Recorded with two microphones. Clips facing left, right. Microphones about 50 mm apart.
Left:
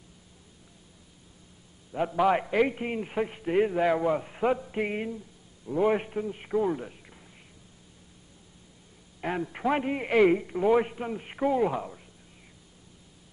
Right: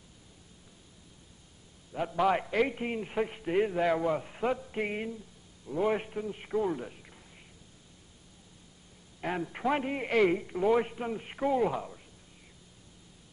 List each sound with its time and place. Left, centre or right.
1.9 s a man's voice: centre
9.2 s a man's voice: centre